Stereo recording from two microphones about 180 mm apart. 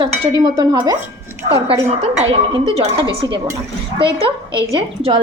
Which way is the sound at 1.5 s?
35° right (ahead or behind).